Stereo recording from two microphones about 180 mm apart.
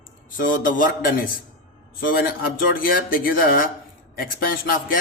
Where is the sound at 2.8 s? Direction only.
55° left (ahead or behind).